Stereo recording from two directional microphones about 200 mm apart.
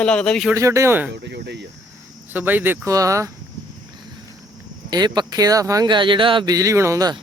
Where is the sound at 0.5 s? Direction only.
15° right (ahead or behind).